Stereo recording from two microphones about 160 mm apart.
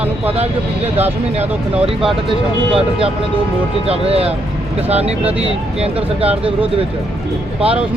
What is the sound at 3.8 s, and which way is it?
Speech, 40° right (ahead or behind).